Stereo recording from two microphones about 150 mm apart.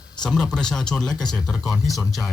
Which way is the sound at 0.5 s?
5° left (ahead or behind).